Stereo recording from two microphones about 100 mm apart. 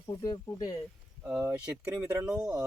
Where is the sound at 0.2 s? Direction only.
40° left (ahead or behind).